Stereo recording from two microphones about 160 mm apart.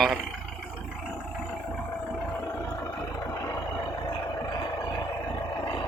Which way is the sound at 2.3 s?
10° left (ahead or behind).